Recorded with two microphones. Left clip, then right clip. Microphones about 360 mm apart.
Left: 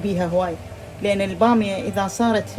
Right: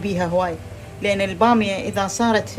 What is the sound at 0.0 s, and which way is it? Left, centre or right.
Speech, right.